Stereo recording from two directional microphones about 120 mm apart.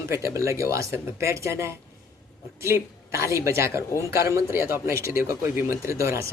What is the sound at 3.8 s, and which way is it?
Speech, 25° left (ahead or behind).